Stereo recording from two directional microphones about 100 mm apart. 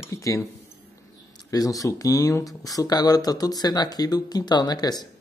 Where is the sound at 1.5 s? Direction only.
35° left (ahead or behind).